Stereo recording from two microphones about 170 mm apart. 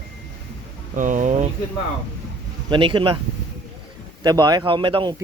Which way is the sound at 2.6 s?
30° right (ahead or behind).